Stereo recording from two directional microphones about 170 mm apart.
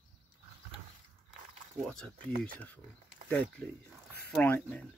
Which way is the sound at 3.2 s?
10° left (ahead or behind).